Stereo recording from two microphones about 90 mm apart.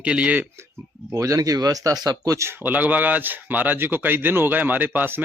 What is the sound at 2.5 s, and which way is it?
A man's voice, 20° right (ahead or behind).